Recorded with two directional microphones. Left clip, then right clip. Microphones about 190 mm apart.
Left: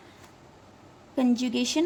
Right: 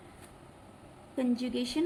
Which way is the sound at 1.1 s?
50° left (ahead or behind).